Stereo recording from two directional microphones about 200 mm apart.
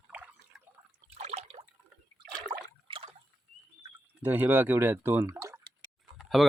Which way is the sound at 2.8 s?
25° right (ahead or behind).